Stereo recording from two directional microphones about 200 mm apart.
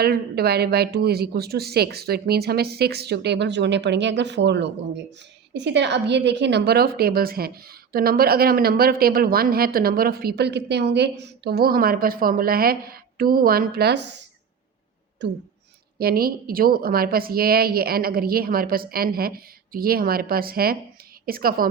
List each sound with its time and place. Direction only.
0.0 s a woman's voice: 50° right (ahead or behind)
15.2 s speech: 60° right (ahead or behind)
16.0 s a woman's voice: 50° right (ahead or behind)